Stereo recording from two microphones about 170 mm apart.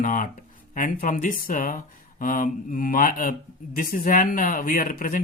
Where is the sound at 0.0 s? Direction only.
50° left (ahead or behind).